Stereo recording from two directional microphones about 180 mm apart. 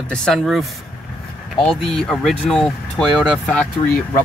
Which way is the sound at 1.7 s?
Centre (ahead or behind).